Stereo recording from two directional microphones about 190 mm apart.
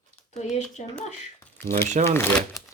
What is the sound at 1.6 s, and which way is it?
Speech, 10° left (ahead or behind).